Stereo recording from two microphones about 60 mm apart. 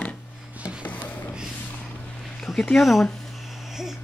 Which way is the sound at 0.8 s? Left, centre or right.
Left.